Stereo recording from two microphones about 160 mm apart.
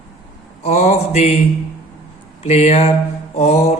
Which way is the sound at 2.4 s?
40° left (ahead or behind).